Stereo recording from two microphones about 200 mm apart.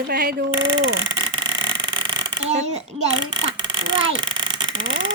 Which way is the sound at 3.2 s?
20° right (ahead or behind).